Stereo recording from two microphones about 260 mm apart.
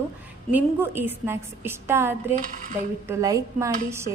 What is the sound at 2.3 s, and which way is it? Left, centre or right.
Dishes, right.